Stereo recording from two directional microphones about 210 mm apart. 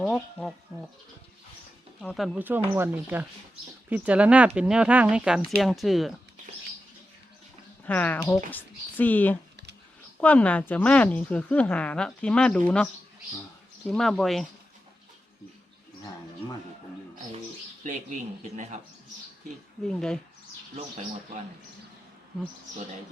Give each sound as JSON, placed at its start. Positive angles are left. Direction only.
{"t": 0.0, "sound": "speech", "side_deg": 0}
{"t": 2.0, "sound": "speech", "side_deg": 0}
{"t": 7.9, "sound": "a woman's voice", "side_deg": 10}
{"t": 17.8, "sound": "speech", "side_deg": -35}
{"t": 19.8, "sound": "speech", "side_deg": 5}